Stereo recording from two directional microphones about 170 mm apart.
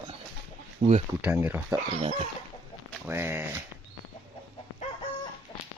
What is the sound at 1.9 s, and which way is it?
Chicken, 35° right (ahead or behind).